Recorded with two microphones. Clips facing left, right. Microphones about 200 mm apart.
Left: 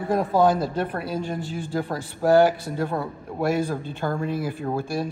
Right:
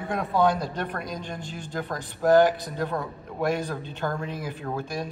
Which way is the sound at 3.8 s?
45° left (ahead or behind).